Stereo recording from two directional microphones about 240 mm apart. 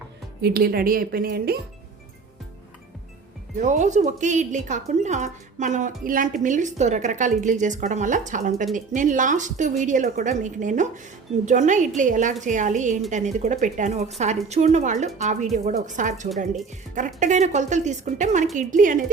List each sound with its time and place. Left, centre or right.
0.4 s a woman's voice: right
3.6 s a woman's voice: right